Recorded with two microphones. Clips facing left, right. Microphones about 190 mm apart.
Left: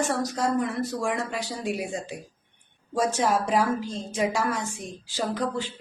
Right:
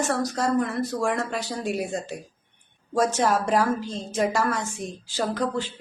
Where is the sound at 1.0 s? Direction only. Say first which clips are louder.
Right 2 dB; 10° left (ahead or behind).